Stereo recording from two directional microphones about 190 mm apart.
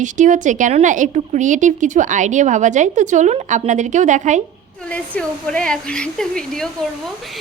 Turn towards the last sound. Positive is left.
turn(degrees=5)  # may be behind; listen again after turning